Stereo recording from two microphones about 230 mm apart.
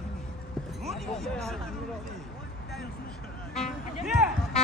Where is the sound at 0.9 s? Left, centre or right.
Centre.